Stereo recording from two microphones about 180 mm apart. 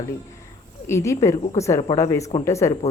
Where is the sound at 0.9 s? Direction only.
15° left (ahead or behind).